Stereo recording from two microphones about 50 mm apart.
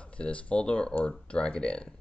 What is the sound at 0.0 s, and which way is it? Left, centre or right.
Speech, left.